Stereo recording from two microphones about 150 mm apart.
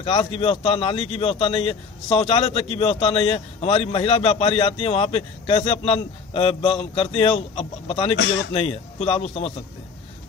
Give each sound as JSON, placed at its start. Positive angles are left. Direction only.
{"t": 0.0, "sound": "a man's voice", "side_deg": 40}